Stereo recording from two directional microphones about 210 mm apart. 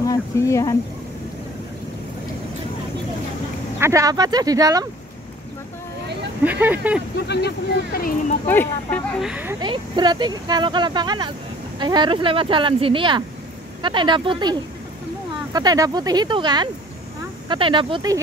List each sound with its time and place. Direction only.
0.0 s speech: 15° left (ahead or behind)
3.8 s speech: 15° right (ahead or behind)
6.4 s speech: 10° right (ahead or behind)
7.2 s speech: 50° left (ahead or behind)
8.5 s speech: 10° left (ahead or behind)
9.2 s speech: 5° right (ahead or behind)
9.6 s speech: 20° right (ahead or behind)